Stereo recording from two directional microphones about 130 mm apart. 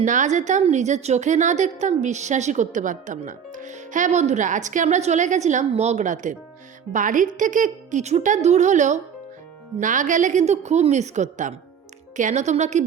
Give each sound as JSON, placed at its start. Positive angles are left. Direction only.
{"t": 0.0, "sound": "a woman's voice", "side_deg": -70}
{"t": 6.9, "sound": "a woman's voice", "side_deg": -90}
{"t": 9.8, "sound": "a woman's voice", "side_deg": -80}